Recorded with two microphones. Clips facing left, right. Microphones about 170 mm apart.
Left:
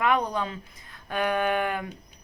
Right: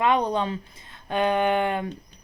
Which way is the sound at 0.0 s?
25° right (ahead or behind).